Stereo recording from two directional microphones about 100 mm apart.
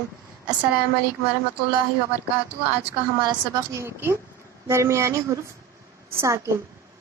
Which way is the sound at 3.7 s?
25° right (ahead or behind).